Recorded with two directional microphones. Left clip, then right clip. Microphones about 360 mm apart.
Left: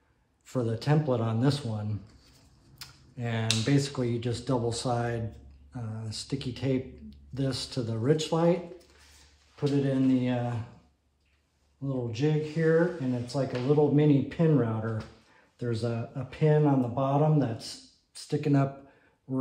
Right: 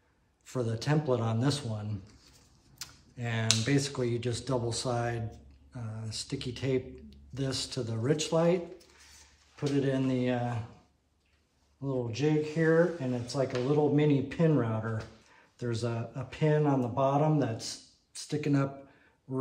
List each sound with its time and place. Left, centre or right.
0.5 s speech: centre
11.8 s speech: centre